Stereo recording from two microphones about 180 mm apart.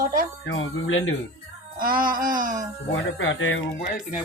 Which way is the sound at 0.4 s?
90° left.